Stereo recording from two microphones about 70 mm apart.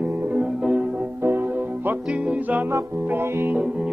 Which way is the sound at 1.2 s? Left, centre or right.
Right.